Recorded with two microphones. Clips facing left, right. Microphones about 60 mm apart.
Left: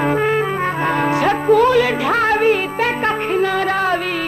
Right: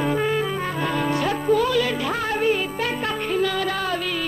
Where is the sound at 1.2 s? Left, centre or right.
Left.